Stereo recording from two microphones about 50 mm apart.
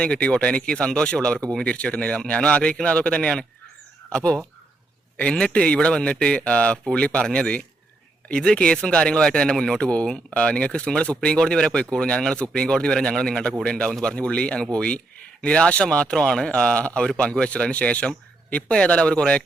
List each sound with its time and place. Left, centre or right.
0.0 s speech: left